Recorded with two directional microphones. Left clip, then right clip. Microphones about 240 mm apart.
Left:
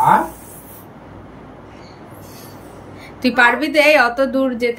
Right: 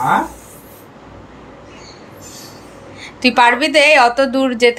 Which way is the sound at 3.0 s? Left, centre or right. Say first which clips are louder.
Right 2 dB; centre.